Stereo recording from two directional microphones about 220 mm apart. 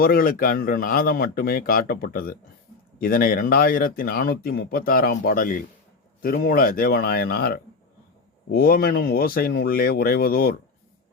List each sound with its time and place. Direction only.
0.0 s speech: 40° left (ahead or behind)